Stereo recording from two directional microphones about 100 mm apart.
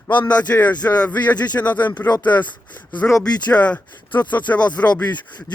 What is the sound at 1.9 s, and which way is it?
Speech, 40° left (ahead or behind).